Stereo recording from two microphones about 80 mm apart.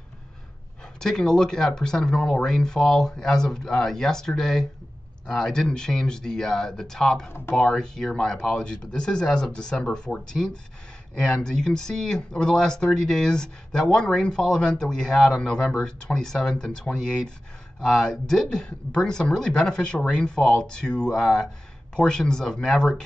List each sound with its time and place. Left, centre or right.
0.9 s speech: centre
7.2 s speech: left
7.5 s speech: centre